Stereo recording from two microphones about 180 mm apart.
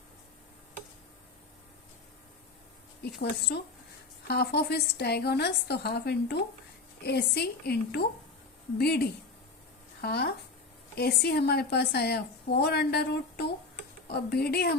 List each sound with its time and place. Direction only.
3.0 s a woman's voice: 65° left (ahead or behind)